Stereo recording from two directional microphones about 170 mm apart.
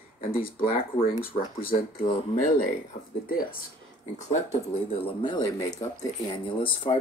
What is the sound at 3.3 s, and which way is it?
Speech, 60° left (ahead or behind).